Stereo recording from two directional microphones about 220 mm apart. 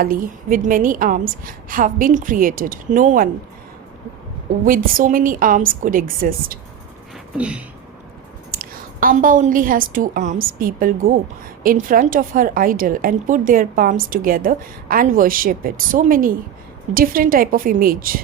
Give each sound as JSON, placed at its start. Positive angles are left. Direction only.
{"t": 0.0, "sound": "a woman's voice", "side_deg": -40}
{"t": 4.6, "sound": "a woman's voice", "side_deg": -40}
{"t": 7.3, "sound": "a sound", "side_deg": -5}
{"t": 8.4, "sound": "a woman's voice", "side_deg": -40}